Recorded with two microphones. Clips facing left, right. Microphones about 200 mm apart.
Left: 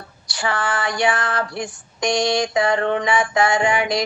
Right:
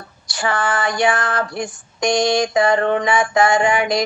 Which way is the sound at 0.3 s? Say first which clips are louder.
Right 3 dB; 50° right (ahead or behind).